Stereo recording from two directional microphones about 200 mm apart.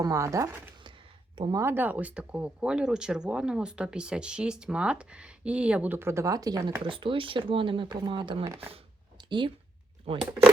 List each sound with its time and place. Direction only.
0.0 s speech: 15° right (ahead or behind)
8.7 s a sound: 25° right (ahead or behind)
10.1 s speech: 30° right (ahead or behind)